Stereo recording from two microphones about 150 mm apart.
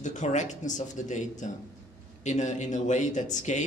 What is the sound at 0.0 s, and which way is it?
A man's voice, 55° left (ahead or behind).